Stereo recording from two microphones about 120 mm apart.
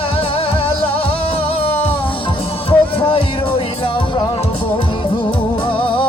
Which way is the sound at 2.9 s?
45° left (ahead or behind).